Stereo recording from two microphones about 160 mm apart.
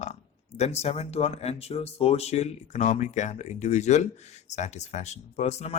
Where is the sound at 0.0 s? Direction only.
45° left (ahead or behind).